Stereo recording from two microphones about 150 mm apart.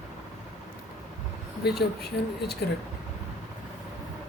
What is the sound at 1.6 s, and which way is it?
Speech, 90° left.